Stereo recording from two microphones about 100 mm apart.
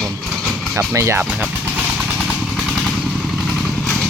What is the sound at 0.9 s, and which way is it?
Speech, 30° right (ahead or behind).